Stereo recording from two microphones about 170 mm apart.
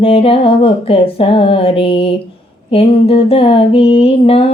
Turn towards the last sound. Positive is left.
turn(degrees=35)  # may be behind; listen again after turning